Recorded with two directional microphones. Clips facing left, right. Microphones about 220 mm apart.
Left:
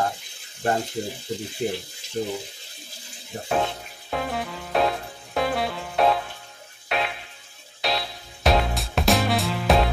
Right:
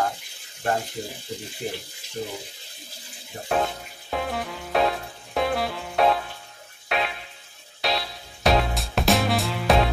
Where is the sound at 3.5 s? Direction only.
Centre (ahead or behind).